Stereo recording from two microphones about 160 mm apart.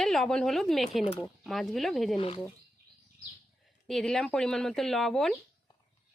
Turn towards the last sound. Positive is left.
turn(degrees=0)  # may be behind; listen again after turning